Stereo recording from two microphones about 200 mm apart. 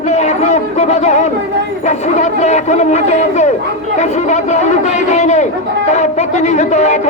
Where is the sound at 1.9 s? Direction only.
35° left (ahead or behind).